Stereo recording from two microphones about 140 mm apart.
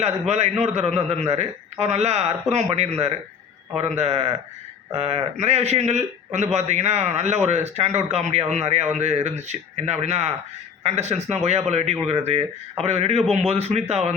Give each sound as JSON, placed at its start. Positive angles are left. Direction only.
{"t": 0.0, "sound": "a man's voice", "side_deg": -55}